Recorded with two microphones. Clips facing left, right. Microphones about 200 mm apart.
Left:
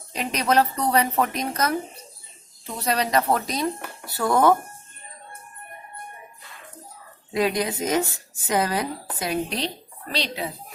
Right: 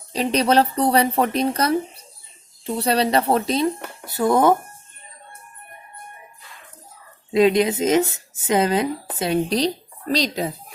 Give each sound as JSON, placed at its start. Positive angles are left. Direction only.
{"t": 0.1, "sound": "speech", "side_deg": -30}
{"t": 7.3, "sound": "speech", "side_deg": -20}